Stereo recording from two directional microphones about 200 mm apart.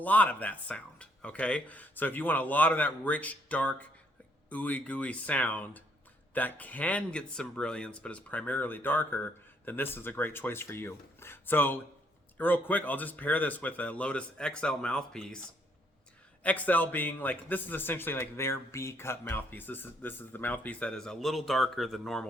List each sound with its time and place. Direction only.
0.0 s a man's voice: 10° left (ahead or behind)
16.4 s a man's voice: 5° left (ahead or behind)